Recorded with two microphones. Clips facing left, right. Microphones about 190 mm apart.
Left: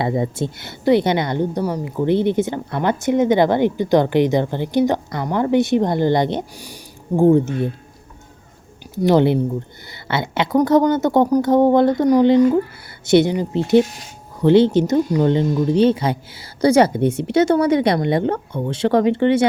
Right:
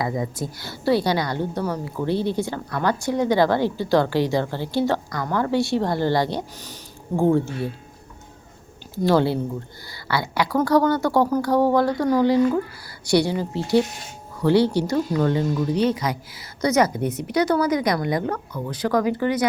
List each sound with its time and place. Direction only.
0.0 s a woman's voice: 25° left (ahead or behind)
9.0 s a woman's voice: 20° left (ahead or behind)